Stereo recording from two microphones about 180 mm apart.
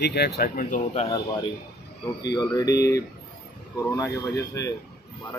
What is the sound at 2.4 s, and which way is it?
Speech, 20° left (ahead or behind).